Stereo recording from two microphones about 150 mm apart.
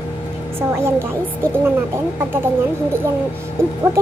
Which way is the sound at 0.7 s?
15° right (ahead or behind).